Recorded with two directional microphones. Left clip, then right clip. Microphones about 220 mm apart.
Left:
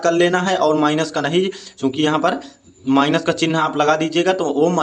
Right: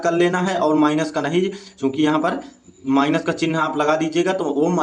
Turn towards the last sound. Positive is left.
turn(degrees=20)  # may be behind; listen again after turning